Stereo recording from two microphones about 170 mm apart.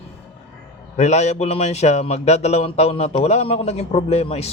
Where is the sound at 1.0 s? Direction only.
40° left (ahead or behind).